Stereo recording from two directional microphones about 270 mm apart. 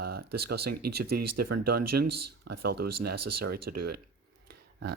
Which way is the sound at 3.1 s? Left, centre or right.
Right.